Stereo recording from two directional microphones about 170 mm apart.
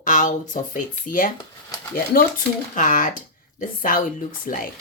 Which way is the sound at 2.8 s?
50° left (ahead or behind).